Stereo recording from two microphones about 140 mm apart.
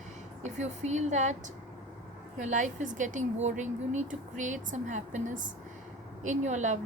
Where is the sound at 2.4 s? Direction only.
60° right (ahead or behind).